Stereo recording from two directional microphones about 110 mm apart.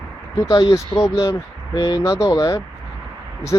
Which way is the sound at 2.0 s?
30° left (ahead or behind).